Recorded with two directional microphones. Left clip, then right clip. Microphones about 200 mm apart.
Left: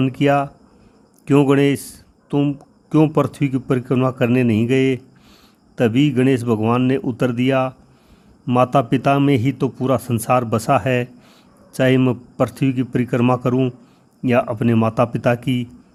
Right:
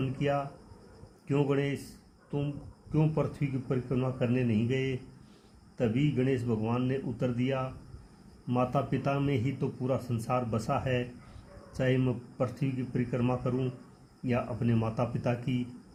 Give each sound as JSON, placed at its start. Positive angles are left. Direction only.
{"t": 0.0, "sound": "a man's voice", "side_deg": 50}
{"t": 2.9, "sound": "a man's voice", "side_deg": 55}